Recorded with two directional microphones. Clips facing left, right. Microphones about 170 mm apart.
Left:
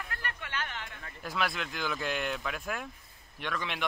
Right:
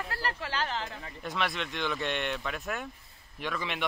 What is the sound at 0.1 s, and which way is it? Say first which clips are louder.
Chatter: right 5 dB; 30° right (ahead or behind).